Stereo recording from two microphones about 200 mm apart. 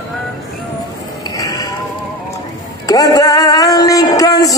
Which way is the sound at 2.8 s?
20° left (ahead or behind).